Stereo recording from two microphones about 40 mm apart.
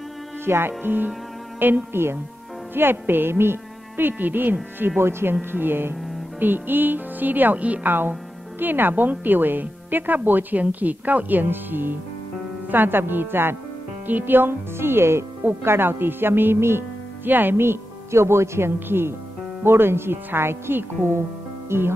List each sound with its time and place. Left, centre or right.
0.5 s speech: right
4.1 s a woman's voice: right
7.5 s a woman's voice: right
7.8 s a woman's voice: right
14.0 s speech: right
17.3 s speech: right
18.2 s a woman's voice: right